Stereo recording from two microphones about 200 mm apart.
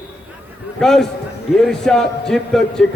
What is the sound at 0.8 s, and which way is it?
A man's voice, centre (ahead or behind).